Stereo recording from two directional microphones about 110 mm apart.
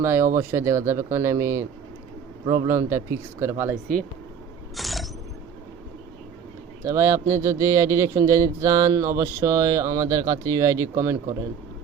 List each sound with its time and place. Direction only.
0.0 s a man's voice: 25° right (ahead or behind)
2.6 s a man's voice: 25° right (ahead or behind)
4.8 s a sound: centre (ahead or behind)
6.8 s a man's voice: 25° right (ahead or behind)